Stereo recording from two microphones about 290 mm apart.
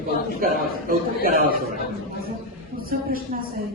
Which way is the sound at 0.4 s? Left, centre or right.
Right.